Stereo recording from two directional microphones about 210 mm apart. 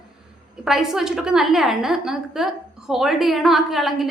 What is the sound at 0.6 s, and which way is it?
A woman's voice, centre (ahead or behind).